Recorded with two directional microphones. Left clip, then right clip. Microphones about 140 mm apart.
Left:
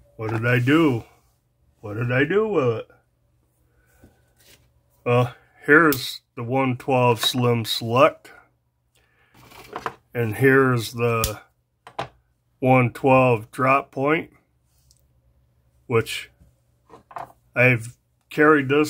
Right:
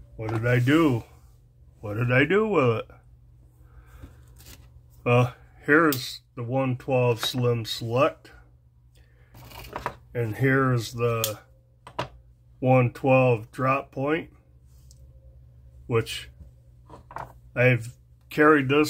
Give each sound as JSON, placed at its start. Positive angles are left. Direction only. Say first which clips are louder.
{"t": 0.4, "sound": "speech", "louder": "left 3 dB", "side_deg": 30}
{"t": 1.8, "sound": "speech", "louder": "even", "side_deg": 5}
{"t": 5.0, "sound": "speech", "louder": "left 2 dB", "side_deg": 0}
{"t": 5.6, "sound": "speech", "louder": "left 5 dB", "side_deg": 25}
{"t": 9.7, "sound": "speech", "louder": "left 2 dB", "side_deg": -40}
{"t": 10.1, "sound": "speech", "louder": "left 7 dB", "side_deg": 45}
{"t": 12.5, "sound": "speech", "louder": "left 3 dB", "side_deg": 35}
{"t": 15.9, "sound": "speech", "louder": "left 4 dB", "side_deg": 30}
{"t": 17.5, "sound": "speech", "louder": "left 4 dB", "side_deg": 30}
{"t": 18.3, "sound": "speech", "louder": "left 2 dB", "side_deg": 5}